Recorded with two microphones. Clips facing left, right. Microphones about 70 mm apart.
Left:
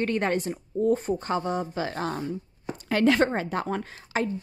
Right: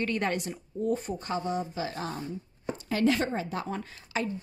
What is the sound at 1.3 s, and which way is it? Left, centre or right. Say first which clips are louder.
Speech: even; left.